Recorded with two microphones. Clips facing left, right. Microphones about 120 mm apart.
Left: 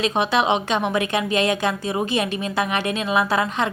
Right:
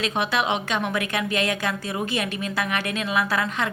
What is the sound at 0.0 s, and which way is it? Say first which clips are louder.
A woman's voice: left 4 dB; 20° left (ahead or behind).